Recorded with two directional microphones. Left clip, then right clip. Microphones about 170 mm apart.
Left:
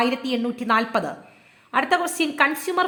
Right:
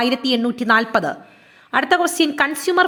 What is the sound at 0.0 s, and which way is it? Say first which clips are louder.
A woman's voice: right 4 dB; 25° right (ahead or behind).